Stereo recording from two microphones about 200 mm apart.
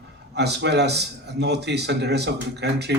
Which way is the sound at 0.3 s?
55° right (ahead or behind).